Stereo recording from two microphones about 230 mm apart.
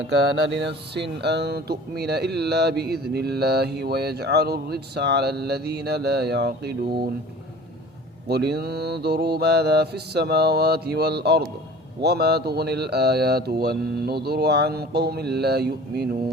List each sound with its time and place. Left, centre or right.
0.6 s speech: right
8.3 s speech: right